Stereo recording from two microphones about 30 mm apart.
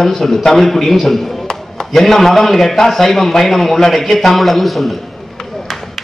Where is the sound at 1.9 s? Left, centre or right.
Centre.